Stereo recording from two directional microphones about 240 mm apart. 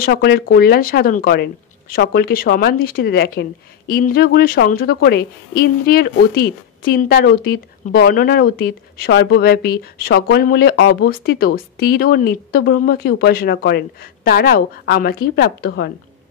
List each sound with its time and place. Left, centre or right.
0.0 s speech: left